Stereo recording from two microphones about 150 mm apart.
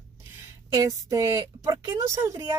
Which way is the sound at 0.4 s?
20° right (ahead or behind).